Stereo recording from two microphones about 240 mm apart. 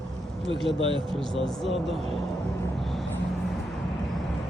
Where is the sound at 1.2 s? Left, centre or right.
Centre.